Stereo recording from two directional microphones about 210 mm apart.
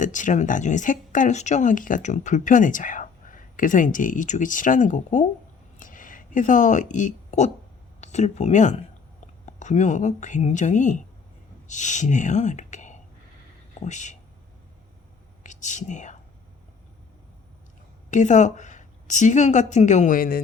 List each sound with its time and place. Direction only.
0.0 s speech: 35° left (ahead or behind)
5.8 s a sound: 40° left (ahead or behind)
8.0 s speech: 35° left (ahead or behind)
15.4 s speech: 35° left (ahead or behind)
18.1 s a woman's voice: 35° left (ahead or behind)